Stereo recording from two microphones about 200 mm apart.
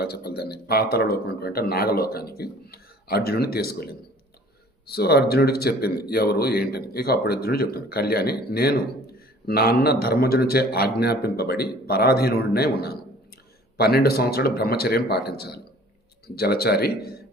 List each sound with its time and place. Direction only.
0.0 s speech: 55° left (ahead or behind)